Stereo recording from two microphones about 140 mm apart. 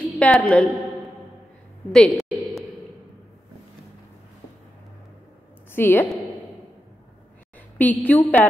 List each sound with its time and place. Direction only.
0.0 s a woman's voice: 5° left (ahead or behind)
1.9 s a woman's voice: centre (ahead or behind)
5.8 s a woman's voice: 15° left (ahead or behind)
7.7 s a woman's voice: 10° left (ahead or behind)